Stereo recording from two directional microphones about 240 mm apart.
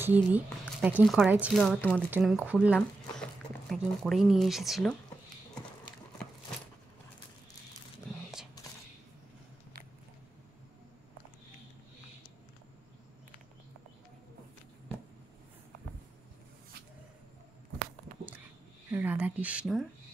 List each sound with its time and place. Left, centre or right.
0.0 s speech: centre
2.0 s speech: centre
18.9 s a sound: centre